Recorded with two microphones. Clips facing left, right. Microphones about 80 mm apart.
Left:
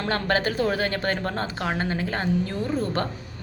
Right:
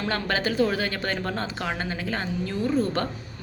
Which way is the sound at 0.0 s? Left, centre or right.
Left.